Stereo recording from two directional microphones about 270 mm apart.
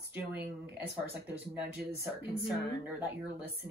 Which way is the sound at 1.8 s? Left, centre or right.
Right.